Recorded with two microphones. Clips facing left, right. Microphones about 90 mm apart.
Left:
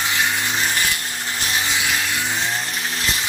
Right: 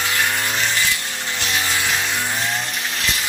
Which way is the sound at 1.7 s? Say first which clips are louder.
Right 1 dB; 10° left (ahead or behind).